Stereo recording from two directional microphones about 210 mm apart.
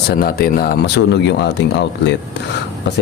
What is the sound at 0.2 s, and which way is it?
Speech, 45° left (ahead or behind).